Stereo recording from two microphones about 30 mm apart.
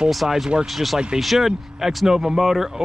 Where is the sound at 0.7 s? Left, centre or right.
Centre.